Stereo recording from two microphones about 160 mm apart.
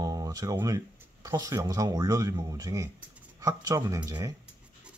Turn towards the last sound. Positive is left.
turn(degrees=-20)  # may be behind; listen again after turning